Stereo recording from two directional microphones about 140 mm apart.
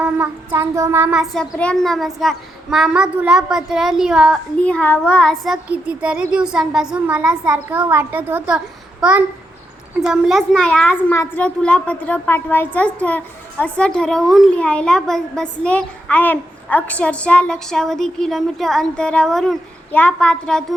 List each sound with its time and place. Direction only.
0.0 s a sound: 15° right (ahead or behind)
1.2 s a woman's voice: 5° left (ahead or behind)
4.6 s a child's voice: 10° left (ahead or behind)